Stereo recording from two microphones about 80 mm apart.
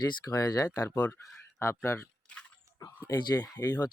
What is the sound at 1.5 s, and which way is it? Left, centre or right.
Speech, left.